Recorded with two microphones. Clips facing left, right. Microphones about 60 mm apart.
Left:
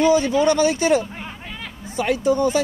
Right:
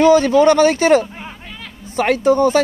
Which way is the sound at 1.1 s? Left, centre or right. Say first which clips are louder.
Right 1 dB; centre.